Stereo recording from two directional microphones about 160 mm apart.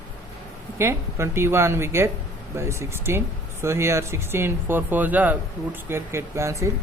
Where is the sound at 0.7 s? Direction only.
15° right (ahead or behind).